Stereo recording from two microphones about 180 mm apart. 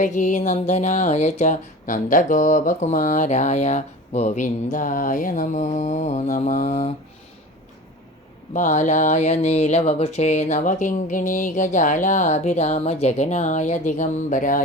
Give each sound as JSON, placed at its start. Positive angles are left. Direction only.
{"t": 0.0, "sound": "speech", "side_deg": 45}
{"t": 8.5, "sound": "speech", "side_deg": 45}